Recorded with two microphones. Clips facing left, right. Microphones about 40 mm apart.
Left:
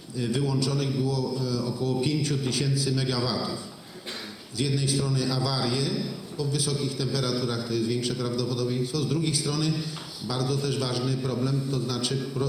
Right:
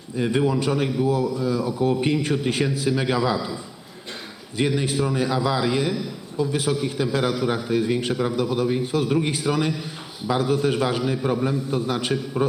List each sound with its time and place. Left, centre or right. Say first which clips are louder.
0.2 s a man's voice: right 6 dB; right
4.5 s a man's voice: right 5 dB; right